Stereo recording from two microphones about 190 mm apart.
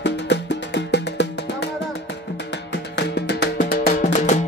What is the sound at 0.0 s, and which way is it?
Music, 65° left (ahead or behind).